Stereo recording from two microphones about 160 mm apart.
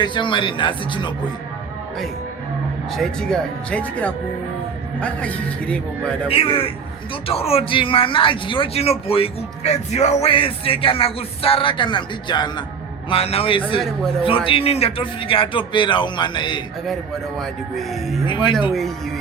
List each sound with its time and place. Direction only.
0.0 s speech: 30° left (ahead or behind)
2.9 s speech: 5° left (ahead or behind)
6.2 s speech: 35° left (ahead or behind)
17.3 s speech: centre (ahead or behind)
18.3 s speech: 30° left (ahead or behind)
18.7 s speech: centre (ahead or behind)